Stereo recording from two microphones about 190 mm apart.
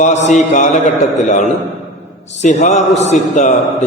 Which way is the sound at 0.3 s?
40° left (ahead or behind).